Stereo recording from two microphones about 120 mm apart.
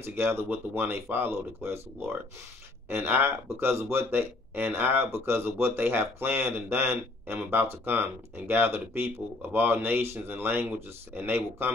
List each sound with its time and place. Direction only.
0.0 s speech: 20° right (ahead or behind)